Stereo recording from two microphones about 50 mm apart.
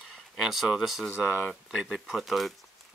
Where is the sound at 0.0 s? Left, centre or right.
Centre.